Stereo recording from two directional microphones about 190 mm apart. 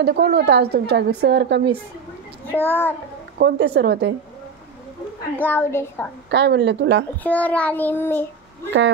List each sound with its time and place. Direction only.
0.0 s a woman's voice: 60° right (ahead or behind)
2.5 s child singing: 10° left (ahead or behind)
3.3 s a woman's voice: 60° right (ahead or behind)
5.4 s child singing: 10° left (ahead or behind)
6.3 s a woman's voice: 65° right (ahead or behind)
7.2 s child singing: 10° left (ahead or behind)